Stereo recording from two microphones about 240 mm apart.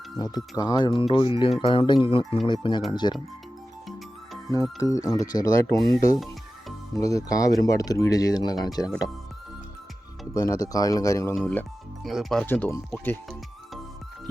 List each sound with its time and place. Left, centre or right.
0.2 s speech: centre
4.4 s speech: centre
6.9 s speech: centre
10.3 s speech: centre